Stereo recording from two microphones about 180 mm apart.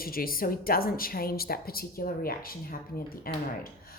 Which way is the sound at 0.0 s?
55° left (ahead or behind).